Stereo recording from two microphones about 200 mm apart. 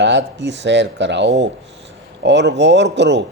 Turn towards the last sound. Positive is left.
turn(degrees=-60)  # may be behind; listen again after turning